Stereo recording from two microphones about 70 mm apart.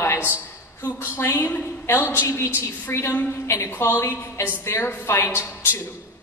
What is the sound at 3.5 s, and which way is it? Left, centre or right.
A woman's voice, left.